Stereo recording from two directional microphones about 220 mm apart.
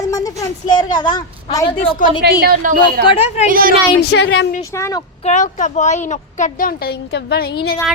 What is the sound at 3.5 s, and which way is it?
Speech, 40° right (ahead or behind).